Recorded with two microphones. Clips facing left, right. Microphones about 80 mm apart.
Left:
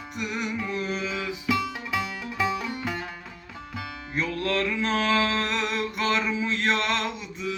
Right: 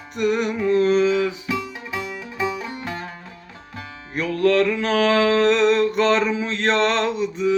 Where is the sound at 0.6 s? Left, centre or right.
Right.